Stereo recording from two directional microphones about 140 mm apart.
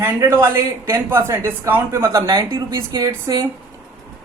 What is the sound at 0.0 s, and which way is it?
Speech, 15° right (ahead or behind).